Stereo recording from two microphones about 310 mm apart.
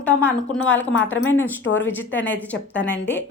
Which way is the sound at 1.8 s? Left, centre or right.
Centre.